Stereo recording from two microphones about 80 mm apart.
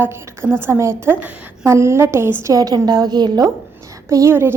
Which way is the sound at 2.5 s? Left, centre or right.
Right.